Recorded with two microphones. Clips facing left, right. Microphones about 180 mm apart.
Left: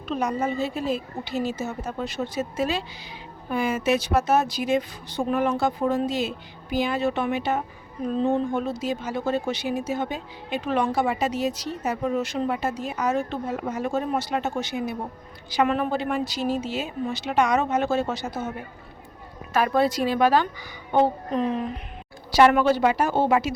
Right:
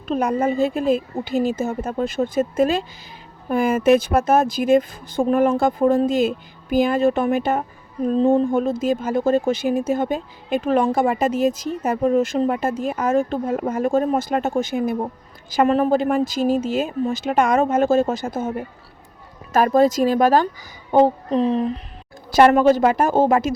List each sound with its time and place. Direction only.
0.2 s speech: 55° right (ahead or behind)
8.0 s speech: 35° right (ahead or behind)
8.4 s speech: 50° right (ahead or behind)
19.5 s speech: 45° right (ahead or behind)
22.3 s speech: 45° right (ahead or behind)